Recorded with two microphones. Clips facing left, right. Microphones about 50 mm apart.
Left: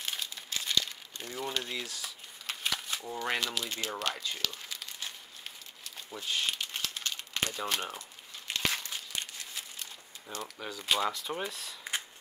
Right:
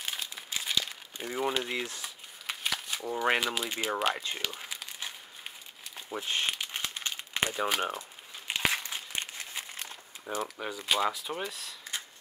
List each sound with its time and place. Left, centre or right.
0.0 s crumpling: centre; by 2.0 s right
2.4 s a sound: centre
3.3 s speech: centre
3.9 s speech: right
4.5 s crumpling: centre
6.0 s speech: right
6.5 s crumpling: centre
10.3 s speech: centre